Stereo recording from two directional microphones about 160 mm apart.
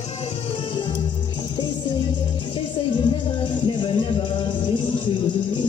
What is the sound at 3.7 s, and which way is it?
Music, 30° left (ahead or behind).